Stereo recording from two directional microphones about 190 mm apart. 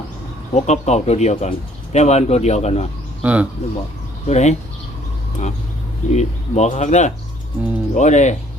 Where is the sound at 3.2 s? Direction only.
10° right (ahead or behind).